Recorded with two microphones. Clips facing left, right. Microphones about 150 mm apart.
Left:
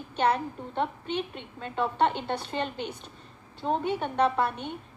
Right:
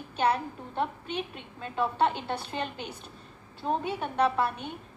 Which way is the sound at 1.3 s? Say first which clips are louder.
Left 1 dB; 5° right (ahead or behind).